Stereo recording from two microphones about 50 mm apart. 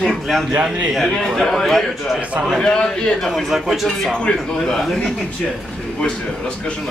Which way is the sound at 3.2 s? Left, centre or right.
Centre.